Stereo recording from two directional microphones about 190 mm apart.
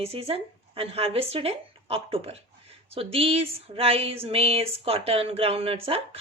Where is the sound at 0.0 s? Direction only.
30° right (ahead or behind).